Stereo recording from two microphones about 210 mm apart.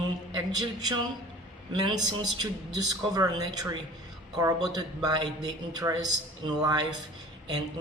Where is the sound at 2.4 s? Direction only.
15° right (ahead or behind).